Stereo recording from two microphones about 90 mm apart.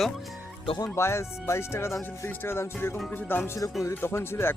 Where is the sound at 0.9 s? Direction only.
30° left (ahead or behind).